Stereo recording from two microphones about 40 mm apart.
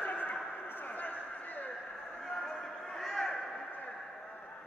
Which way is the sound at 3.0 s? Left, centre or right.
Centre.